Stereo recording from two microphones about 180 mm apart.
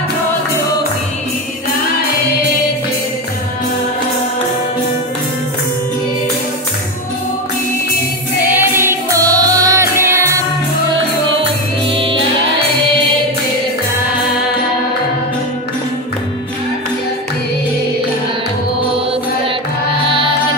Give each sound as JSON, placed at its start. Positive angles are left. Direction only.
{"t": 8.5, "sound": "music", "side_deg": -10}
{"t": 11.3, "sound": "music", "side_deg": -30}